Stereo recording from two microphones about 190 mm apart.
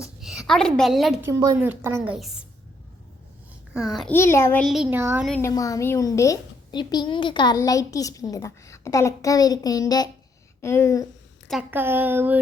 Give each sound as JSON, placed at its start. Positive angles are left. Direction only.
{"t": 0.0, "sound": "a woman's voice", "side_deg": -5}
{"t": 1.2, "sound": "speech", "side_deg": -15}
{"t": 3.8, "sound": "a child's voice", "side_deg": 0}
{"t": 4.1, "sound": "a woman's voice", "side_deg": 15}
{"t": 4.6, "sound": "speech", "side_deg": 0}
{"t": 5.3, "sound": "a woman's voice", "side_deg": 15}
{"t": 11.7, "sound": "speech", "side_deg": -10}